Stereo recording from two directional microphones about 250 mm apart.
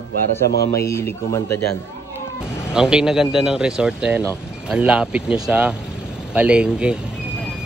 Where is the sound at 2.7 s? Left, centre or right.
Centre.